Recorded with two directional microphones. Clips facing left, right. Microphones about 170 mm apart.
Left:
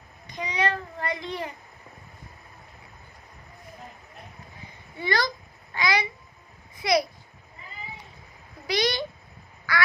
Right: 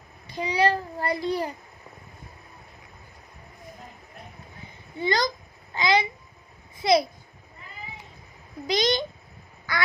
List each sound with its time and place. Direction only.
0.3 s a child's voice: 30° right (ahead or behind)
5.0 s a child's voice: 20° right (ahead or behind)
8.6 s a child's voice: 20° right (ahead or behind)
9.7 s quack: 20° right (ahead or behind)